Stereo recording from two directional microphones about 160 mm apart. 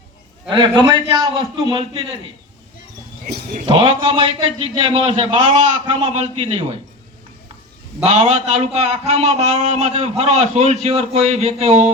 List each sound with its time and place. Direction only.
0.5 s a man's voice: 25° right (ahead or behind)
3.7 s a man's voice: 35° right (ahead or behind)
8.0 s a man's voice: 40° right (ahead or behind)